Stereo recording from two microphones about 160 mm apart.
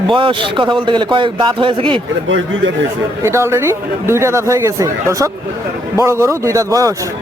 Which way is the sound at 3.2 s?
15° right (ahead or behind).